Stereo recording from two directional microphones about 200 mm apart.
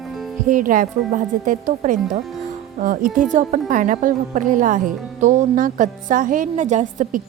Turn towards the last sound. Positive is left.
turn(degrees=-40)  # may be behind; listen again after turning